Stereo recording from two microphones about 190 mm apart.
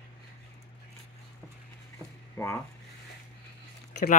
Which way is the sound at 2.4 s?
15° left (ahead or behind).